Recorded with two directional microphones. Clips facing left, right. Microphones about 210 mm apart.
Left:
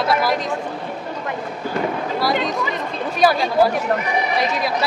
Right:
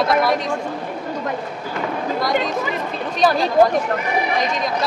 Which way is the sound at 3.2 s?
10° left (ahead or behind).